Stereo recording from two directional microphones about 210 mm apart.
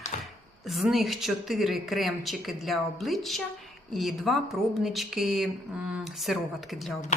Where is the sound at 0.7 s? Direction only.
Centre (ahead or behind).